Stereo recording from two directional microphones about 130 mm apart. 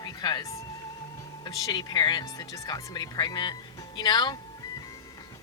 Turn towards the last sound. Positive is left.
turn(degrees=35)  # may be behind; listen again after turning